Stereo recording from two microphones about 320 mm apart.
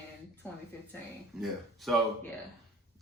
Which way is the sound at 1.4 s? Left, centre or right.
Centre.